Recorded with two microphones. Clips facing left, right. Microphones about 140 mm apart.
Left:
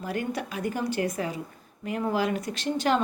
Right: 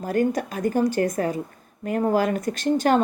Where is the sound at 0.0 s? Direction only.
45° right (ahead or behind).